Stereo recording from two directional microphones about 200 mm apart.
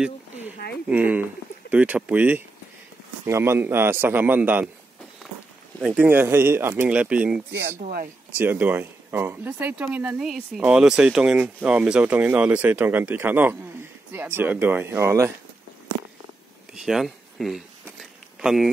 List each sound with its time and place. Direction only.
0.8 s speech: 10° right (ahead or behind)
5.8 s speech: 5° right (ahead or behind)
7.8 s speech: 45° right (ahead or behind)
8.4 s speech: 10° right (ahead or behind)
16.7 s speech: centre (ahead or behind)